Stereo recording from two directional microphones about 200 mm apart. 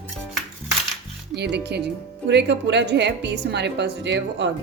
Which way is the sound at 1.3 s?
55° right (ahead or behind).